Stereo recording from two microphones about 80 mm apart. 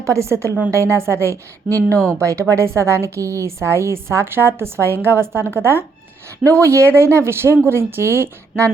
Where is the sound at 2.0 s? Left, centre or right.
Right.